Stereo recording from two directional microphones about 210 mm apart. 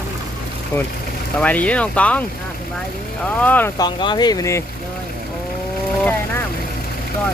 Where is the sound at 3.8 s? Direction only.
20° left (ahead or behind).